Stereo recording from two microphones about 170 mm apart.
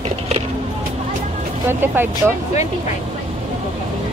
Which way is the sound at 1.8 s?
10° right (ahead or behind).